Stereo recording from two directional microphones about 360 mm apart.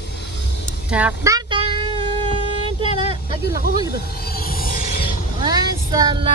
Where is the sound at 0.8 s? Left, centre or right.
Centre.